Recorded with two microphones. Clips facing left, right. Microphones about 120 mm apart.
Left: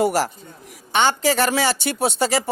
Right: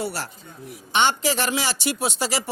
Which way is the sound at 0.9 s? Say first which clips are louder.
Left 3 dB; 40° left (ahead or behind).